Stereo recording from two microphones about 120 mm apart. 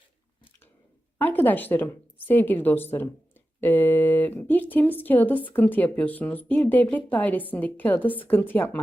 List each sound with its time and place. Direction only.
1.2 s speech: 15° left (ahead or behind)